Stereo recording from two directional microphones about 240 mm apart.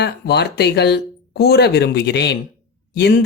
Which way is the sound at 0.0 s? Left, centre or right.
Left.